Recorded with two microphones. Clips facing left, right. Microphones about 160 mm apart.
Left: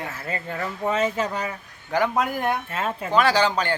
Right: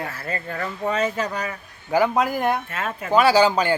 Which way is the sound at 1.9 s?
5° right (ahead or behind).